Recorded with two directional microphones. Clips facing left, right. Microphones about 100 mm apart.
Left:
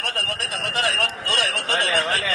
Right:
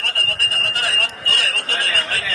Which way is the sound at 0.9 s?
25° left (ahead or behind).